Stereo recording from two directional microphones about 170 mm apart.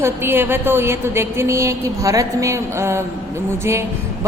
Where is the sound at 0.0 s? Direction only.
15° right (ahead or behind).